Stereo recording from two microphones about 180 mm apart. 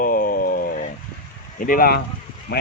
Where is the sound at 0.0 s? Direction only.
50° left (ahead or behind).